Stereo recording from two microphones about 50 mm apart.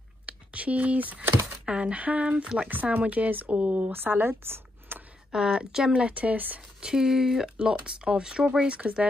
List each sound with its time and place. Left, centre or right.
0.3 s speech: right
2.7 s speech: right
3.8 s speech: right
5.3 s speech: centre
6.8 s speech: centre
7.5 s speech: centre